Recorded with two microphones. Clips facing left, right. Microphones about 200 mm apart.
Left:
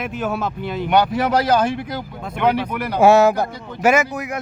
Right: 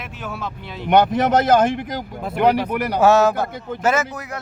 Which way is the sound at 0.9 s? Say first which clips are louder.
Right 2 dB; 20° right (ahead or behind).